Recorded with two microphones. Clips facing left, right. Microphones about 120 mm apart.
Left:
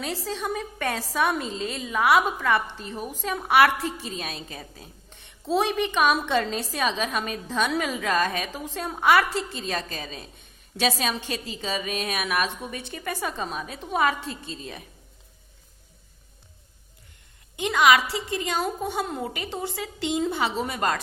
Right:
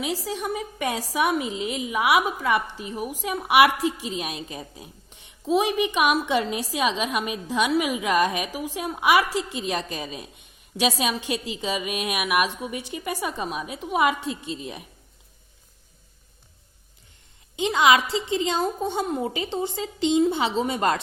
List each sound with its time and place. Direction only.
0.0 s a woman's voice: 15° right (ahead or behind)
17.6 s a woman's voice: 25° right (ahead or behind)